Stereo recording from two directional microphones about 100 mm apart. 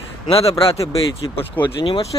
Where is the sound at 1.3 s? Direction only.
55° left (ahead or behind).